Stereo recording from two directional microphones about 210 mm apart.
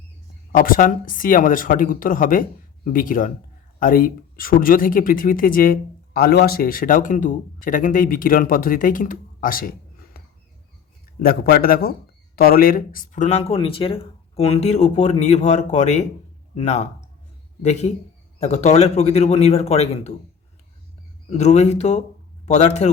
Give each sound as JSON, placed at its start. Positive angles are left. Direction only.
{"t": 0.5, "sound": "speech", "side_deg": 40}
{"t": 21.2, "sound": "speech", "side_deg": 30}